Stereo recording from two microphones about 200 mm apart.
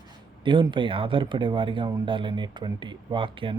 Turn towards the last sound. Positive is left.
turn(degrees=-25)  # may be behind; listen again after turning